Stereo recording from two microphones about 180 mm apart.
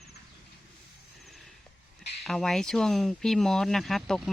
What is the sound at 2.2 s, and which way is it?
Speech, centre (ahead or behind).